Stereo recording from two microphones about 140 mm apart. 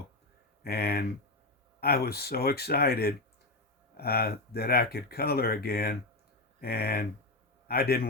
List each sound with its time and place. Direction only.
0.6 s speech: 90° left